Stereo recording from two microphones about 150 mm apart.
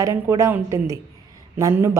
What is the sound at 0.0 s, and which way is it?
Speech, 20° right (ahead or behind).